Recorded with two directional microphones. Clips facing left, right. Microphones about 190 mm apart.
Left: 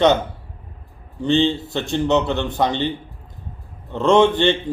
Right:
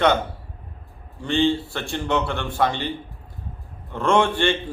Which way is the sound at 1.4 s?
20° left (ahead or behind).